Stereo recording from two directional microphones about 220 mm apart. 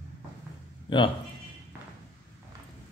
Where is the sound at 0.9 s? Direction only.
20° left (ahead or behind).